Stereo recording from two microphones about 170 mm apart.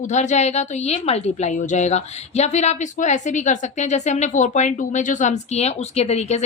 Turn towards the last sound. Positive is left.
turn(degrees=40)  # may be behind; listen again after turning